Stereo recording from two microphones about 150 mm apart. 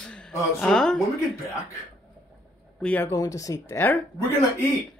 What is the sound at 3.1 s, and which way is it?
Speech, 20° left (ahead or behind).